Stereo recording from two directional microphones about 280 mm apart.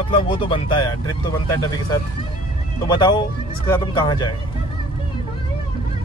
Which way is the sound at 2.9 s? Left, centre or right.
Centre.